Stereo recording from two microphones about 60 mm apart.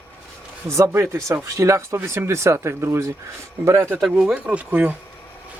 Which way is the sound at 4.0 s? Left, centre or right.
Centre.